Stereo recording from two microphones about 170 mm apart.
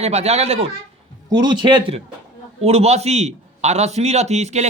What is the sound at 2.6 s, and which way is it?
A man's voice, 40° right (ahead or behind).